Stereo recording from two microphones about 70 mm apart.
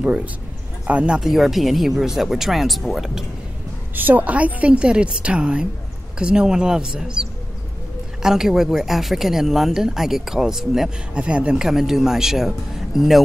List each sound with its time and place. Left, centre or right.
0.0 s a woman's voice: centre
1.2 s speech: centre
3.9 s a woman's voice: right; by 13.2 s centre